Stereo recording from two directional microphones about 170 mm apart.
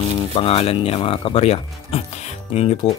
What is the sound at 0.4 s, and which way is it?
Speech, 35° left (ahead or behind).